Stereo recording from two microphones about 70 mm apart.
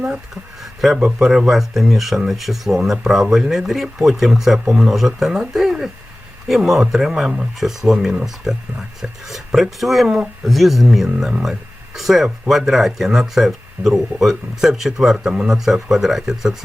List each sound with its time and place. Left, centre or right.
0.6 s speech: centre